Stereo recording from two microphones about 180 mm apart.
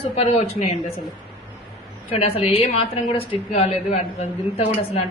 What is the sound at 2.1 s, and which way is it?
A woman's voice, 35° left (ahead or behind).